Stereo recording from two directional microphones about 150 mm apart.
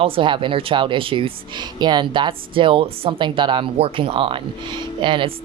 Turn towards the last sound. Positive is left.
turn(degrees=-35)  # may be behind; listen again after turning